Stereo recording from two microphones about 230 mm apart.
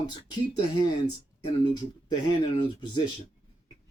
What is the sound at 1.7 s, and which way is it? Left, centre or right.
Speech, centre.